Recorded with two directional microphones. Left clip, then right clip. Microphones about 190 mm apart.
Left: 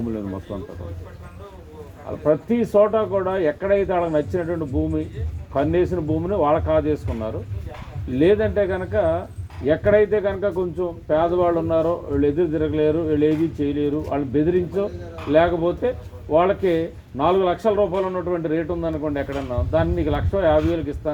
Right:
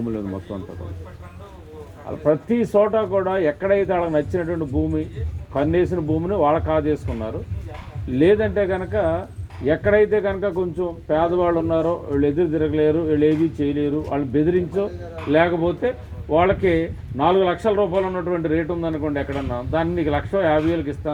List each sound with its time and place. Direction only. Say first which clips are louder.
2.0 s speech: even; 25° right (ahead or behind)